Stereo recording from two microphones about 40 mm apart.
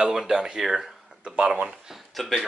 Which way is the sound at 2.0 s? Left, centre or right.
Centre.